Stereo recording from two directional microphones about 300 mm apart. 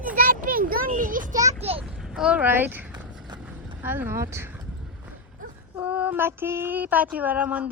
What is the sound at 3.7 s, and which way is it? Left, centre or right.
Speech, centre.